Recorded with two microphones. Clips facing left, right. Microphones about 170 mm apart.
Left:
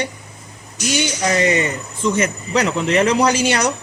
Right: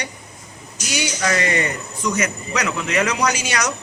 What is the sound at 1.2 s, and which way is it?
Speech, 20° left (ahead or behind).